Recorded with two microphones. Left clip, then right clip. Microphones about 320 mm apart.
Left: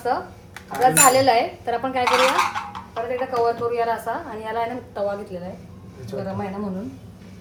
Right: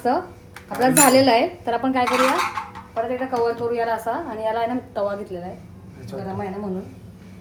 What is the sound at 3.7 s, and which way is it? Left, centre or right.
A woman's voice, centre.